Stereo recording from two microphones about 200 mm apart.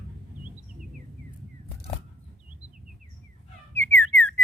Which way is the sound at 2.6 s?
80° right.